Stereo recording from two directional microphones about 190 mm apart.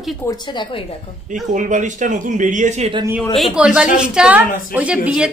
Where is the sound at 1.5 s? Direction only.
40° right (ahead or behind).